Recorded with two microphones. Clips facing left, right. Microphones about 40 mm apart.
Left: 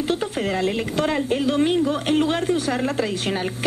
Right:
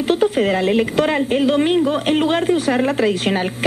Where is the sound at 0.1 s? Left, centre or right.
Right.